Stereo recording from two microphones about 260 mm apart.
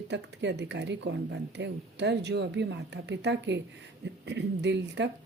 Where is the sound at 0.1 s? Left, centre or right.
Right.